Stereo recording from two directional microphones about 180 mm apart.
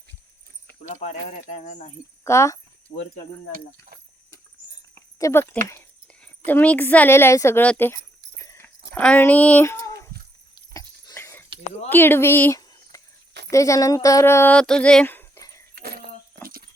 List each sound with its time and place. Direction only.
1.0 s speech: 40° left (ahead or behind)
2.2 s speech: 15° left (ahead or behind)
4.9 s a sound: 15° left (ahead or behind)
6.2 s a woman's voice: 10° left (ahead or behind)
10.8 s dog: 20° left (ahead or behind)
11.9 s speech: 10° left (ahead or behind)
15.7 s keys jangling: 60° right (ahead or behind)